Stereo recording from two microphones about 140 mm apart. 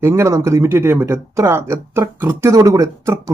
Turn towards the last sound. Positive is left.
turn(degrees=-20)  # may be behind; listen again after turning